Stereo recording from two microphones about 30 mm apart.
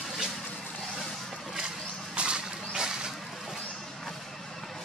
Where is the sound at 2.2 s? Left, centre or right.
Right.